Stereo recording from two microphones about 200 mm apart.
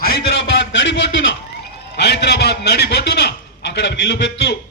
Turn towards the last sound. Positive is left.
turn(degrees=55)  # may be behind; listen again after turning